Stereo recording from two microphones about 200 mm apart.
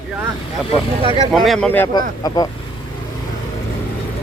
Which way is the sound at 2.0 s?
20° left (ahead or behind).